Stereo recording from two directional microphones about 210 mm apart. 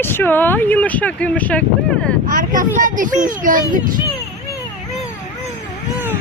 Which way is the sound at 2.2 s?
40° right (ahead or behind).